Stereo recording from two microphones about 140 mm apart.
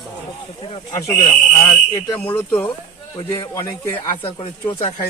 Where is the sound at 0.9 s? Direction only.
25° left (ahead or behind).